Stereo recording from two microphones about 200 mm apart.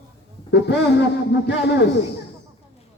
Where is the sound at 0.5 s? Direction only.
60° left (ahead or behind).